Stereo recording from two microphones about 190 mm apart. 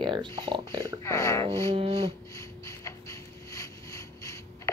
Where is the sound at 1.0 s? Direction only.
15° left (ahead or behind).